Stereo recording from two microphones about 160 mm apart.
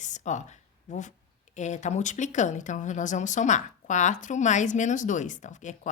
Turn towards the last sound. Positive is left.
turn(degrees=50)  # may be behind; listen again after turning